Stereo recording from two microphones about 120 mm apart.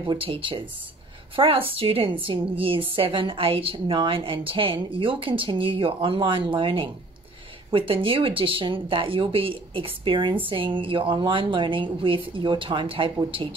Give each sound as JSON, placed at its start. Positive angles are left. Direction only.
{"t": 0.0, "sound": "speech", "side_deg": -45}